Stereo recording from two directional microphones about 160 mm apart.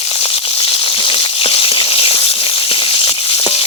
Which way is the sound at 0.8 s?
35° left (ahead or behind).